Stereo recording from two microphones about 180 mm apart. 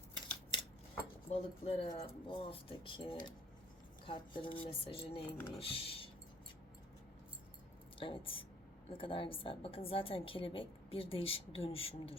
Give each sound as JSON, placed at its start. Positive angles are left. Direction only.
{"t": 1.3, "sound": "a woman's voice", "side_deg": 35}
{"t": 7.9, "sound": "a woman's voice", "side_deg": 30}